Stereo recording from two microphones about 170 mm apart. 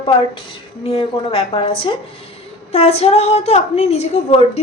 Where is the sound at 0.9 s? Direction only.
35° left (ahead or behind).